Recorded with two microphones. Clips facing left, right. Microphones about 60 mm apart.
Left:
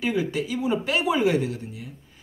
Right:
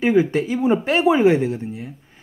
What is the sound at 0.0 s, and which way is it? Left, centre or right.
Speech, right.